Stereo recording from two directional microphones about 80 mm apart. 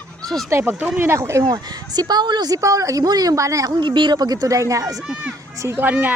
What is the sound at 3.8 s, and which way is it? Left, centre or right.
A woman's voice, right.